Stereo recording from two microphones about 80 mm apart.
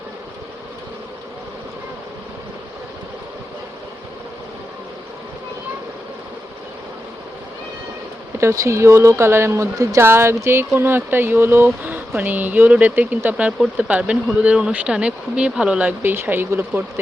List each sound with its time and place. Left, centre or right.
8.4 s speech: right
9.7 s speech: right
10.0 s speech: right